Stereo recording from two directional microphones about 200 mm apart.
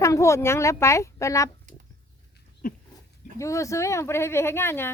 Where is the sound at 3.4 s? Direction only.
15° left (ahead or behind).